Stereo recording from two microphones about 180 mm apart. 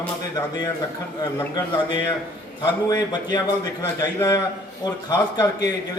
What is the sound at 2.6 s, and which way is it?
Speech, 25° left (ahead or behind).